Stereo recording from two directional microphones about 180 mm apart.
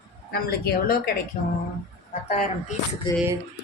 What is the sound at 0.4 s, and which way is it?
Speech, 55° left (ahead or behind).